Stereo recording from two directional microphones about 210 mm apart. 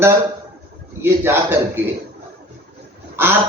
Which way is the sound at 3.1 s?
10° right (ahead or behind).